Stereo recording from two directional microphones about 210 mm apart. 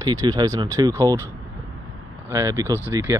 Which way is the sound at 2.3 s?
15° right (ahead or behind).